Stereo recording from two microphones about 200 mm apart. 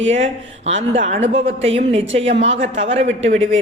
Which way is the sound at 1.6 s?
30° right (ahead or behind).